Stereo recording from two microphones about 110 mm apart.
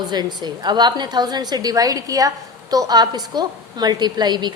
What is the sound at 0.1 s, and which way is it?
A woman's voice, 40° right (ahead or behind).